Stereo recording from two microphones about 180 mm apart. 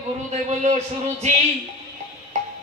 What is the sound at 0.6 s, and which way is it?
Speech, 40° right (ahead or behind).